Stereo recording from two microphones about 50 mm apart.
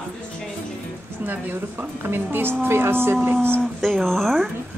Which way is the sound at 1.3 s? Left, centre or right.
Right.